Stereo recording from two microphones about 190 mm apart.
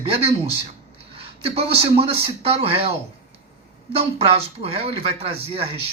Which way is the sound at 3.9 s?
30° right (ahead or behind).